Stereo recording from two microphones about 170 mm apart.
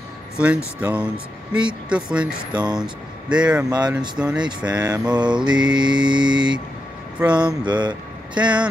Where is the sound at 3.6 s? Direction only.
25° right (ahead or behind).